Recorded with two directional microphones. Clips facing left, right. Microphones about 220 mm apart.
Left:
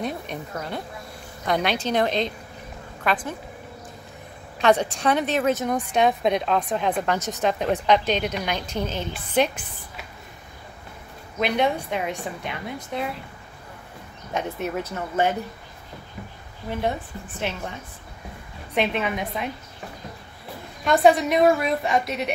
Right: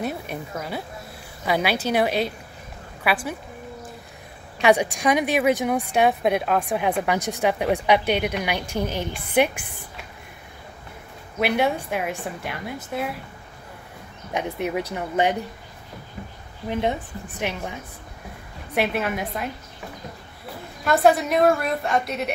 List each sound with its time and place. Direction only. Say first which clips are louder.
0.0 s a woman's voice: right 1 dB; 5° right (ahead or behind)
4.6 s a woman's voice: right 1 dB; 10° right (ahead or behind)
11.3 s a woman's voice: right 1 dB; 10° right (ahead or behind)
14.3 s a woman's voice: right 2 dB; 15° right (ahead or behind)
16.6 s a woman's voice: right 2 dB; 20° right (ahead or behind)
18.8 s a woman's voice: even; 5° right (ahead or behind)
20.8 s a woman's voice: left 1 dB; centre (ahead or behind)